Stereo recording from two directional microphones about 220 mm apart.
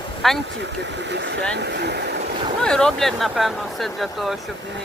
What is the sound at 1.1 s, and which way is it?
Speech, 50° right (ahead or behind).